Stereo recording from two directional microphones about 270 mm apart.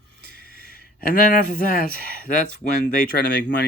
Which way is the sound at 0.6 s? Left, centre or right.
Left.